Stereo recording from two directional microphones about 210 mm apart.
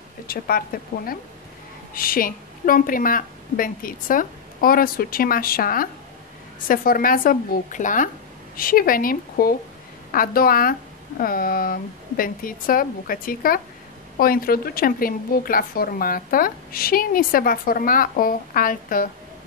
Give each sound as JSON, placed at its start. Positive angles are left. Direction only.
{"t": 0.3, "sound": "a woman's voice", "side_deg": 45}